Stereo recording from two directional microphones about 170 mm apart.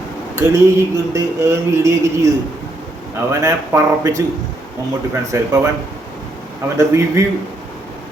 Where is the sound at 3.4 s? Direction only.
20° right (ahead or behind).